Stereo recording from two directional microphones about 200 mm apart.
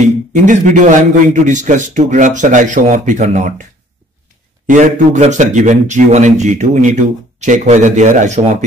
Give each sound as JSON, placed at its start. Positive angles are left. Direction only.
{"t": 0.0, "sound": "speech", "side_deg": -40}
{"t": 4.6, "sound": "speech", "side_deg": -40}